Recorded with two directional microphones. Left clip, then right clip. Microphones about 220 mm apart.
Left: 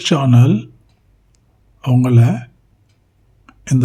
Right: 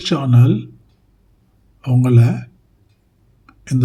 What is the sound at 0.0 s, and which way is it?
Speech, 15° left (ahead or behind).